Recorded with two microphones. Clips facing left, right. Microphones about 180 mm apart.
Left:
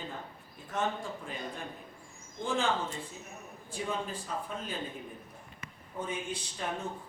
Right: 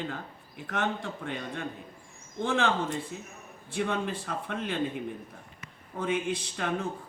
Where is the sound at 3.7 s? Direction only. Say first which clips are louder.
Right 5 dB; 75° right (ahead or behind).